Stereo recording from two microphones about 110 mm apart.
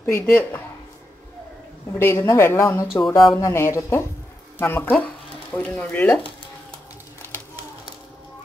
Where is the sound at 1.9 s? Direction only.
25° left (ahead or behind).